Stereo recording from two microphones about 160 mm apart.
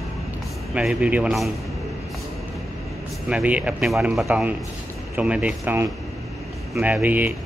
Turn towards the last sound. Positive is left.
turn(degrees=-10)  # may be behind; listen again after turning